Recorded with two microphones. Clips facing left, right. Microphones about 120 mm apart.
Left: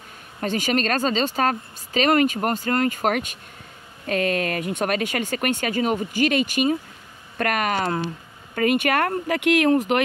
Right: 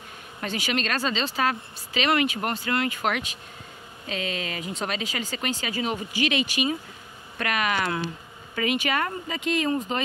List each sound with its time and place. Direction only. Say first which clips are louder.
0.4 s a woman's voice: left 6 dB; 45° left (ahead or behind)
8.5 s speech: left 5 dB; 50° left (ahead or behind); by 10.0 s 70° left (ahead or behind)